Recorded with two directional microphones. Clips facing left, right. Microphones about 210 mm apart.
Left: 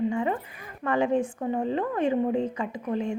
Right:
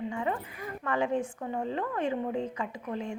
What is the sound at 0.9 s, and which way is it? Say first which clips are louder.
A woman's voice: left 5 dB; 20° left (ahead or behind).